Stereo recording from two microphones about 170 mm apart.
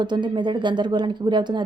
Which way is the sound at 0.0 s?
25° right (ahead or behind).